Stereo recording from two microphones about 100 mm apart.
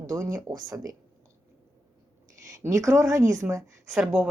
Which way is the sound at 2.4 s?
30° right (ahead or behind).